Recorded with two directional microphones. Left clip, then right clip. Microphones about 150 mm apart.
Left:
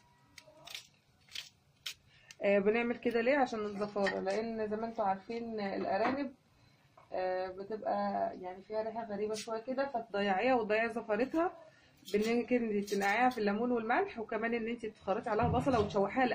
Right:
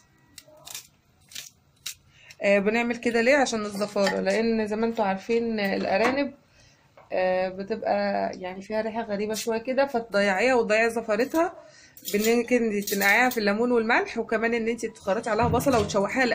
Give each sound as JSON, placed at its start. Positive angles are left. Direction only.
{"t": 2.4, "sound": "speech", "side_deg": -5}
{"t": 4.3, "sound": "speech", "side_deg": -40}
{"t": 10.1, "sound": "speech", "side_deg": -15}